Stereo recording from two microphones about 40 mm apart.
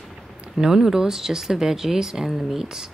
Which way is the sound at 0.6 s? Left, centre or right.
Centre.